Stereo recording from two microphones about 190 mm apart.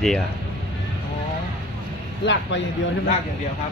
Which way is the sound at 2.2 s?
70° left (ahead or behind).